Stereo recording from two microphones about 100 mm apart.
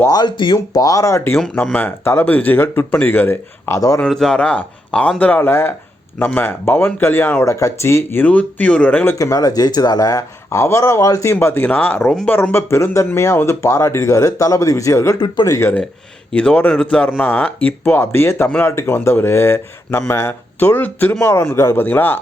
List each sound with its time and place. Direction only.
0.1 s speech: 45° left (ahead or behind); by 3.8 s 20° left (ahead or behind)
3.8 s speech: 35° left (ahead or behind)
4.0 s speech: 5° left (ahead or behind)
9.1 s speech: 35° left (ahead or behind)
16.3 s speech: 10° left (ahead or behind)